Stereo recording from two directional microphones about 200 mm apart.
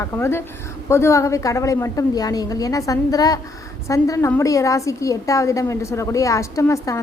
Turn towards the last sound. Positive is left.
turn(degrees=15)  # may be behind; listen again after turning